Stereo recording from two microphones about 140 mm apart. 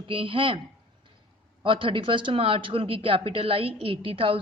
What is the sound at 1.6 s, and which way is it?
A woman's voice, 35° right (ahead or behind).